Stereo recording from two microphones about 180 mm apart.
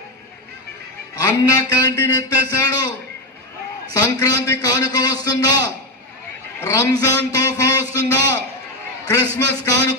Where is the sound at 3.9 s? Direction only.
20° left (ahead or behind).